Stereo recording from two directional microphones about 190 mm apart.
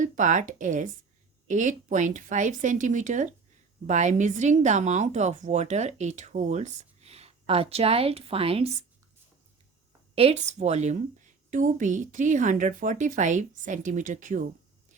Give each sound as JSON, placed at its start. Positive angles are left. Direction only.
{"t": 0.0, "sound": "speech", "side_deg": -40}
{"t": 10.2, "sound": "speech", "side_deg": -35}